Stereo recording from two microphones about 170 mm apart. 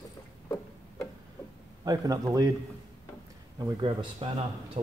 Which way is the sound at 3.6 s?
30° right (ahead or behind).